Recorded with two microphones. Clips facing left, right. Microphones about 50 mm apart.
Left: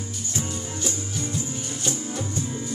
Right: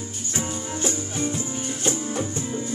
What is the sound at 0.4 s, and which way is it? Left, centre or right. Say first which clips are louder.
Music: right 3 dB; right.